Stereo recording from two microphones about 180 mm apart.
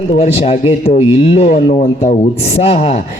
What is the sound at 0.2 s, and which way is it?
Speech, 35° left (ahead or behind).